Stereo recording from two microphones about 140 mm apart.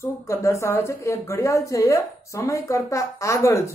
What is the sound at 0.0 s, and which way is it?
A woman's voice, 20° left (ahead or behind).